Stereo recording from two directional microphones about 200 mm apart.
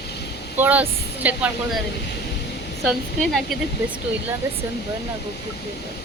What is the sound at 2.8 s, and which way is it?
Speech, centre (ahead or behind).